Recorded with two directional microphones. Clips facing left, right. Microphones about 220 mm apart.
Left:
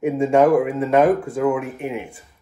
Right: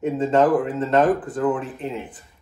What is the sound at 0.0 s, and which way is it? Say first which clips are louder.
Speech: left 3 dB; 10° left (ahead or behind).